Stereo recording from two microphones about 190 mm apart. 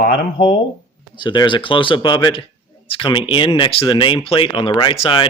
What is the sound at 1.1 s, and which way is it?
Speech, 25° left (ahead or behind).